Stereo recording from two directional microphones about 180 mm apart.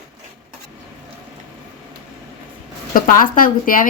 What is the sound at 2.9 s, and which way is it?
Speech, 50° left (ahead or behind).